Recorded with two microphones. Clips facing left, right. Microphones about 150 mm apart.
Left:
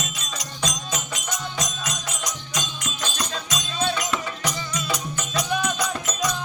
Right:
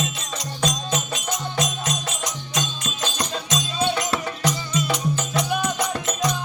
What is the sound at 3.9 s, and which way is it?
Music, 35° right (ahead or behind).